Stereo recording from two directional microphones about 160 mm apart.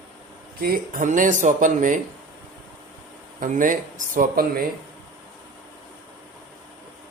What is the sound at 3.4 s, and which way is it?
Speech, 55° right (ahead or behind).